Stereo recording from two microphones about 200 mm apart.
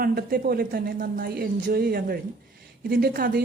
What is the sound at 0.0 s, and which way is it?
A woman's voice, 45° right (ahead or behind).